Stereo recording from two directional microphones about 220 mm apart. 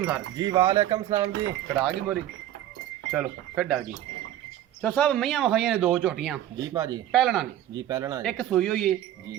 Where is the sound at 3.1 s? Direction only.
5° right (ahead or behind).